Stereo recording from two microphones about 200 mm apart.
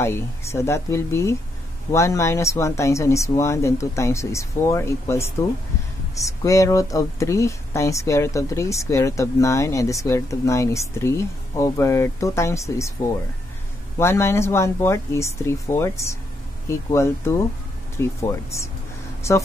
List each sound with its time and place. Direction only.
0.0 s speech: 15° left (ahead or behind)
13.9 s speech: 15° left (ahead or behind)